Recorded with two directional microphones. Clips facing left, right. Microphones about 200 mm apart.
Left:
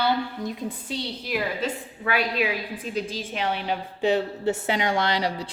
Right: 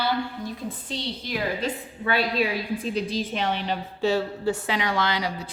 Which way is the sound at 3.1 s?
10° left (ahead or behind).